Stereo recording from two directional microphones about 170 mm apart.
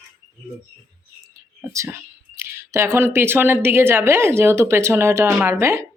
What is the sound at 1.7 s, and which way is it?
Speech, 15° right (ahead or behind).